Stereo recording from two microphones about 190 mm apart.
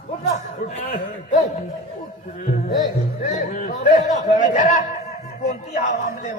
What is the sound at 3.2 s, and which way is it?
A man's voice, 40° left (ahead or behind).